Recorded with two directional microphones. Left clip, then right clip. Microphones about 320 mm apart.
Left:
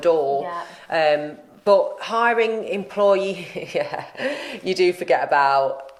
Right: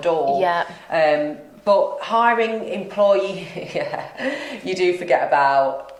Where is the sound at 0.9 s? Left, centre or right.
Left.